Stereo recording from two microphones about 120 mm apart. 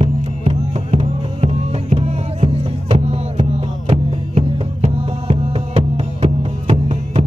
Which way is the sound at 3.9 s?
50° right (ahead or behind).